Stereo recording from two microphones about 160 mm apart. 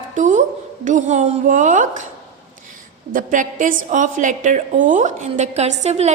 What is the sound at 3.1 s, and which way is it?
A woman's voice, 55° right (ahead or behind).